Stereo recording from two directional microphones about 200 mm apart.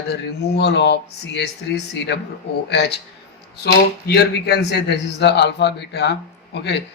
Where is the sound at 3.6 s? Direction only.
55° left (ahead or behind).